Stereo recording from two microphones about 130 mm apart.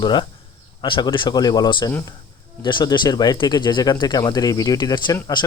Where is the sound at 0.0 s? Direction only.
35° left (ahead or behind).